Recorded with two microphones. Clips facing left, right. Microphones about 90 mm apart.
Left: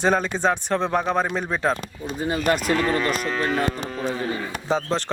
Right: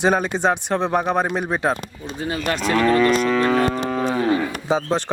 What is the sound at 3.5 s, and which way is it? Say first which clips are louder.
Music: right 5 dB; 70° right (ahead or behind).